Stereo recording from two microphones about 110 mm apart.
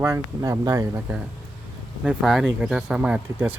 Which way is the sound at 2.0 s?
5° right (ahead or behind).